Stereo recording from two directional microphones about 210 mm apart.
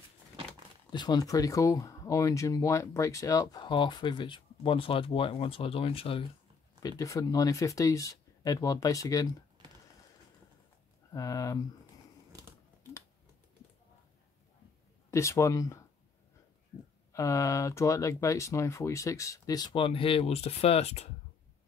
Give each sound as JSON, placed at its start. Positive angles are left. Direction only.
{"t": 0.9, "sound": "speech", "side_deg": 20}
{"t": 11.1, "sound": "speech", "side_deg": 15}
{"t": 15.0, "sound": "speech", "side_deg": 15}
{"t": 17.1, "sound": "speech", "side_deg": 15}